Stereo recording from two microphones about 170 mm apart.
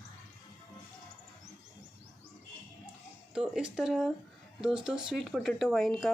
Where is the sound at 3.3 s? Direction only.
5° right (ahead or behind).